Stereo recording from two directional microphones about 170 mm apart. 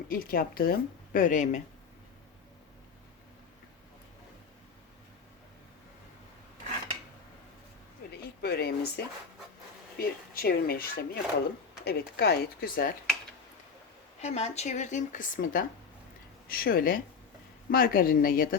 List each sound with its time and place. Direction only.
0.1 s a woman's voice: 60° left (ahead or behind)
8.2 s a woman's voice: 70° left (ahead or behind)
14.2 s a woman's voice: 40° left (ahead or behind); by 18.4 s 55° left (ahead or behind)